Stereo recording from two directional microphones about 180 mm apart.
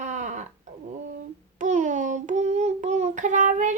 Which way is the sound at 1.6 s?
40° right (ahead or behind).